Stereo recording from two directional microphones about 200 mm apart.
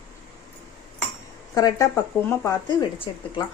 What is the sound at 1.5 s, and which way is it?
Speech, 20° left (ahead or behind).